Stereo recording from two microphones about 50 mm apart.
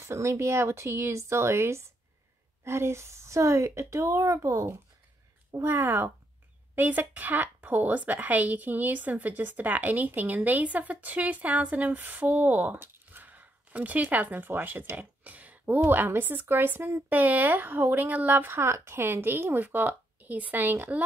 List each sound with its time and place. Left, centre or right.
0.0 s speech: right
5.6 s speech: right
6.7 s speech: right
12.0 s speech: right
18.5 s speech: right